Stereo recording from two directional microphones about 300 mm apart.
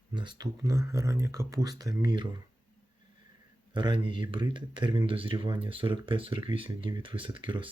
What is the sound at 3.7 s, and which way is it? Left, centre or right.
Speech, centre.